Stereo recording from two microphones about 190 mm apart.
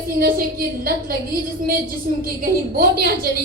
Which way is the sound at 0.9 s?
50° right (ahead or behind).